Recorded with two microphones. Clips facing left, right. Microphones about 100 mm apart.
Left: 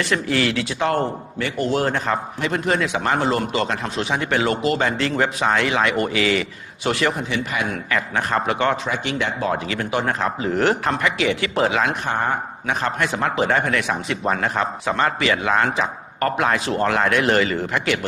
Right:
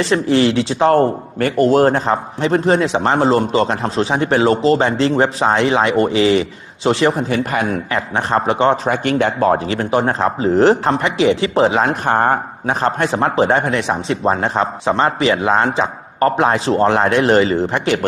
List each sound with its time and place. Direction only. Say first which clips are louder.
0.0 s speech: right 7 dB; 30° right (ahead or behind)
7.3 s speech: right 6 dB; 45° right (ahead or behind)
8.9 s speech: right 8 dB; 45° right (ahead or behind)
9.6 s speech: right 6 dB; 35° right (ahead or behind)
12.1 s speech: right 10 dB; 50° right (ahead or behind)
12.6 s speech: right 5 dB; 30° right (ahead or behind)